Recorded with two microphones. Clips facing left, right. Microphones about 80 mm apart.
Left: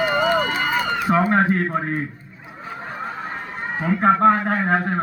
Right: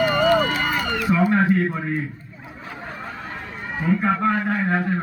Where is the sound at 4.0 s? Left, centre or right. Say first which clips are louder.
Left 10 dB; left.